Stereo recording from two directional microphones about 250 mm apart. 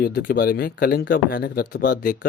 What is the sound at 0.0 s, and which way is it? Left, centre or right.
Speech, left.